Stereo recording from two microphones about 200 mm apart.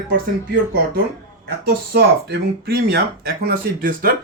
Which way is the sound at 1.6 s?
55° right (ahead or behind).